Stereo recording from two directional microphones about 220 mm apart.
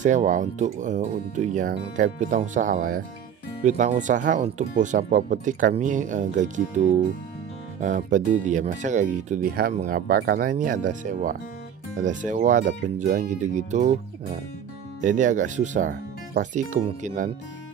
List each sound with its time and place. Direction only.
0.0 s speech: 35° right (ahead or behind)